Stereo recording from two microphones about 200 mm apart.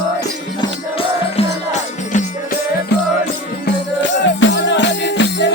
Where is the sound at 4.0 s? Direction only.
65° left (ahead or behind).